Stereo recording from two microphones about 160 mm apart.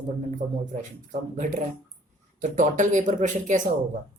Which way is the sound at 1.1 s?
50° right (ahead or behind).